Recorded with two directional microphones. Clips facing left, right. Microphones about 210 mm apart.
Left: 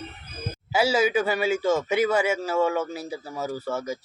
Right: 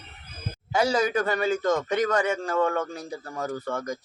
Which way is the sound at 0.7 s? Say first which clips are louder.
Left 2 dB; 5° left (ahead or behind).